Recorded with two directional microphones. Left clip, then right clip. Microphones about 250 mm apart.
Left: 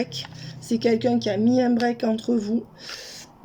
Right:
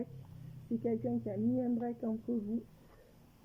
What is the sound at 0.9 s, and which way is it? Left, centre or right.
Speech, left.